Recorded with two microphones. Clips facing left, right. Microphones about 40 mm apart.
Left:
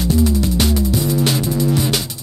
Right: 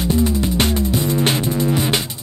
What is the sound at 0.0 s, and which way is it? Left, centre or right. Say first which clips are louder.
Music: left 1 dB; right.